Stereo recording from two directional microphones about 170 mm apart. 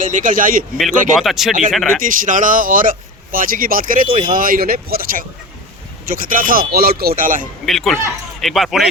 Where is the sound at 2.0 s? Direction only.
50° right (ahead or behind).